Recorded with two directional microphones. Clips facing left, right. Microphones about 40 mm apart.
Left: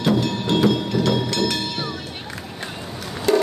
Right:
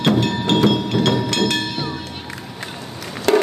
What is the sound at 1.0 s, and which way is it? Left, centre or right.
Train, right.